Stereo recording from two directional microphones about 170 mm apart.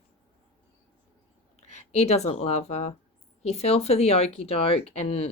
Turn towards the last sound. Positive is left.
turn(degrees=40)  # may be behind; listen again after turning